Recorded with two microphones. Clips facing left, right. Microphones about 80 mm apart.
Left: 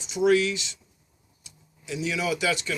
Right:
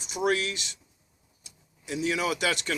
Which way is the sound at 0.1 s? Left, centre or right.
Right.